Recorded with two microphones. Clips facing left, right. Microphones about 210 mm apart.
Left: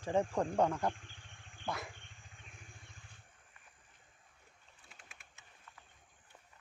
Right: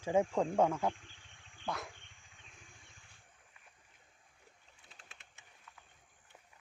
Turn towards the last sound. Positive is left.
turn(degrees=-20)  # may be behind; listen again after turning